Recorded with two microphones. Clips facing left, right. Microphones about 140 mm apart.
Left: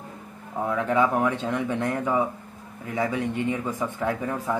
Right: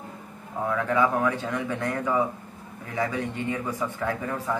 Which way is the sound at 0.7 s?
20° left (ahead or behind).